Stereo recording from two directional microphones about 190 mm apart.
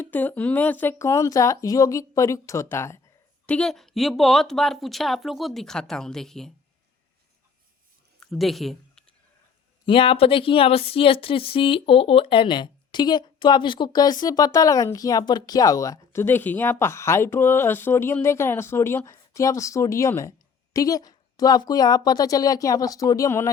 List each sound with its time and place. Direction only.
0.0 s speech: 10° left (ahead or behind)
8.2 s a sound: centre (ahead or behind)
9.8 s speech: 30° left (ahead or behind)